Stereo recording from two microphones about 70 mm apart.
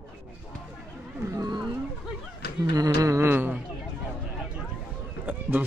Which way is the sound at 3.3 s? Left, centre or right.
Right.